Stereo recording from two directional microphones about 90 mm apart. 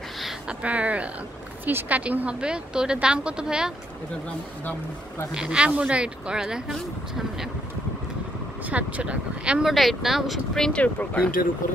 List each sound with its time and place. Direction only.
0.2 s a woman's voice: 10° right (ahead or behind)
5.3 s a woman's voice: 10° right (ahead or behind)
8.6 s speech: 15° right (ahead or behind); by 11.3 s 15° left (ahead or behind)